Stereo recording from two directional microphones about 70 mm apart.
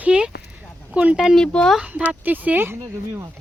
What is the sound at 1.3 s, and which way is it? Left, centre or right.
Speech, centre.